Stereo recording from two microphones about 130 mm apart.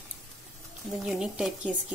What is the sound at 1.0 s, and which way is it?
Speech, 5° right (ahead or behind).